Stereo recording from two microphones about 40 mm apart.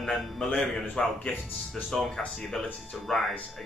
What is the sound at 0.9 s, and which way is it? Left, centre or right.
A man's voice, left.